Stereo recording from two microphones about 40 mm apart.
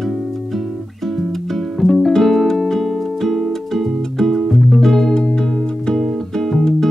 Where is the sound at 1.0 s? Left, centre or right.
Centre.